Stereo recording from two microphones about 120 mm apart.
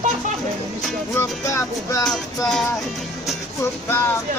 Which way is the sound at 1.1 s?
25° left (ahead or behind).